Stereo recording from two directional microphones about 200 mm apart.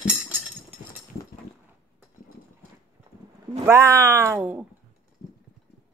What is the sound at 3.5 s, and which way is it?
Speech, 15° right (ahead or behind).